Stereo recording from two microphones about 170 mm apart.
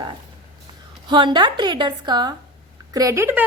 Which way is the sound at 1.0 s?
30° right (ahead or behind).